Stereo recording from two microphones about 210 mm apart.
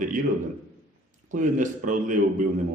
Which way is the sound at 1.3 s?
35° right (ahead or behind).